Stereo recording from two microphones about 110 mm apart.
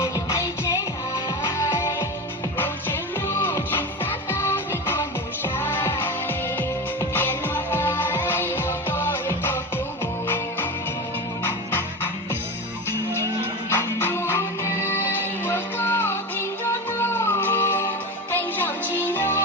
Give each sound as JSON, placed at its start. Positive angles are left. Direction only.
{"t": 0.0, "sound": "music", "side_deg": 25}
{"t": 13.7, "sound": "music", "side_deg": 20}